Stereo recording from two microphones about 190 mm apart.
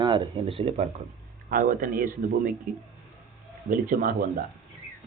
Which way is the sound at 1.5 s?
45° right (ahead or behind).